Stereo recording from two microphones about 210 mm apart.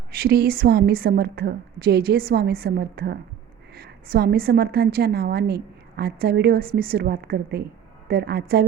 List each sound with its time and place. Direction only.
0.1 s a woman's voice: 45° right (ahead or behind)